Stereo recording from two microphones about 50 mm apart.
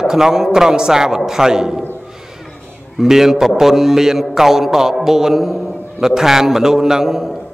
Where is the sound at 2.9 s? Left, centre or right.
Centre.